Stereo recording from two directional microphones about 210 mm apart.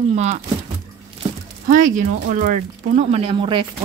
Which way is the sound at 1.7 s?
40° right (ahead or behind).